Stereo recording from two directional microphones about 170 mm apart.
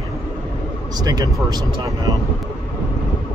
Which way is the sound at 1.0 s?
20° right (ahead or behind).